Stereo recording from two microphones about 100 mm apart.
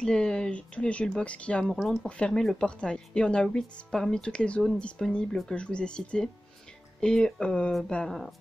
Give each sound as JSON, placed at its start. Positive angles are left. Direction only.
{"t": 0.0, "sound": "speech", "side_deg": 10}